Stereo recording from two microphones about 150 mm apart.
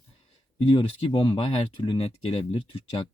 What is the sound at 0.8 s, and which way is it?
Speech, 35° left (ahead or behind).